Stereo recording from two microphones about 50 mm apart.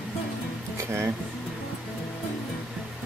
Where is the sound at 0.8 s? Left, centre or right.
Right.